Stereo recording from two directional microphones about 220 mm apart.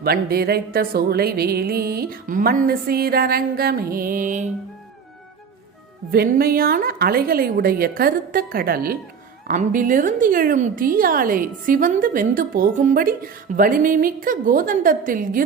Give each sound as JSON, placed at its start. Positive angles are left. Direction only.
{"t": 0.0, "sound": "music", "side_deg": -45}
{"t": 6.1, "sound": "a woman's voice", "side_deg": -40}